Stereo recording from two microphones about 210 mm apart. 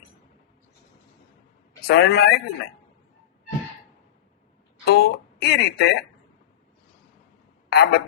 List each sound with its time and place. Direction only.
1.9 s speech: 50° left (ahead or behind)
4.9 s speech: 50° left (ahead or behind)
7.7 s speech: 50° left (ahead or behind)